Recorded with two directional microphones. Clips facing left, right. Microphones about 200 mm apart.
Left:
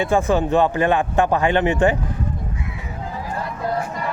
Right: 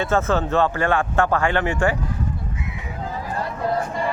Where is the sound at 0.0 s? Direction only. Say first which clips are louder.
Left 2 dB; 15° left (ahead or behind).